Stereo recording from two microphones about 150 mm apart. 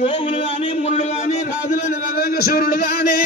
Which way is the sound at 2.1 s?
90° left.